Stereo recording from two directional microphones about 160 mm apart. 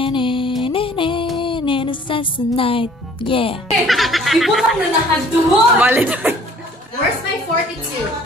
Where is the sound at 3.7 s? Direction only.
Centre (ahead or behind).